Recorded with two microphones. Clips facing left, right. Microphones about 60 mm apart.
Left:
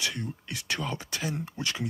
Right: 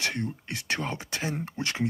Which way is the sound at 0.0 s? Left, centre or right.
Right.